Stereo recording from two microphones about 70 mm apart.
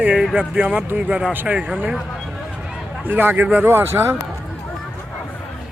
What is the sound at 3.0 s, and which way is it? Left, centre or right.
Speech, right.